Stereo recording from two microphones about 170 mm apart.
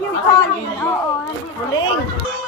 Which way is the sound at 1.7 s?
30° left (ahead or behind).